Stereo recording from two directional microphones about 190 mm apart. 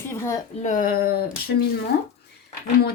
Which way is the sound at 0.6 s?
45° left (ahead or behind).